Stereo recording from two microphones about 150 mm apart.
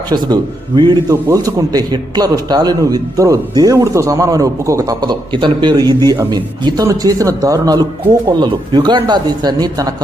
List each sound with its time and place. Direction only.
0.8 s a man's voice: 25° right (ahead or behind)